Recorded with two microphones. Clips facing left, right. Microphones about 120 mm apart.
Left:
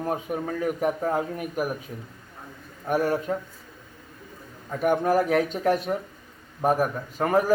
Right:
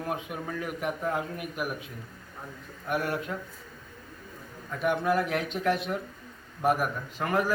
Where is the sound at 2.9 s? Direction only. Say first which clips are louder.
Left 6 dB; 40° left (ahead or behind).